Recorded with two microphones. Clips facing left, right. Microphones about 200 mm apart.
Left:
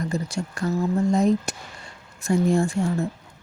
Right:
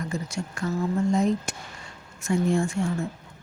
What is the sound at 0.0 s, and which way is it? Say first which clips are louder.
A woman's voice: left 4 dB; 35° left (ahead or behind).